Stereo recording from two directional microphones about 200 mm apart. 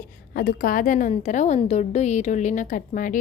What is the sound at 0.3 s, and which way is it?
A woman's voice, 45° left (ahead or behind).